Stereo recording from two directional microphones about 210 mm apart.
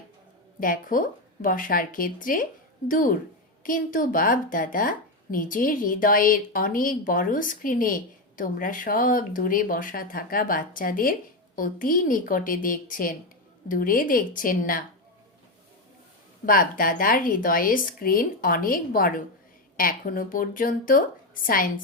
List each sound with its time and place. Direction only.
0.6 s a woman's voice: 40° left (ahead or behind)
16.5 s a woman's voice: 40° left (ahead or behind)